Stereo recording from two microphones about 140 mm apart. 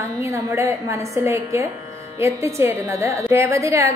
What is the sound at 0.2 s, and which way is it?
A woman's voice, 20° right (ahead or behind).